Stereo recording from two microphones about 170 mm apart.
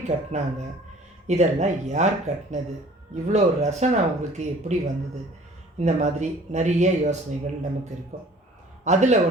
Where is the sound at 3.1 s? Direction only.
40° right (ahead or behind).